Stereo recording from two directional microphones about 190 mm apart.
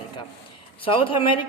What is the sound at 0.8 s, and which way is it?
Speech, 30° left (ahead or behind).